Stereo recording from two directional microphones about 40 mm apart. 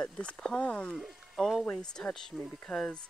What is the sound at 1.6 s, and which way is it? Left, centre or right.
Speech, left.